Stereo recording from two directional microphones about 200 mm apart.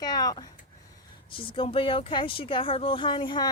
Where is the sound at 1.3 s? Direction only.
25° left (ahead or behind).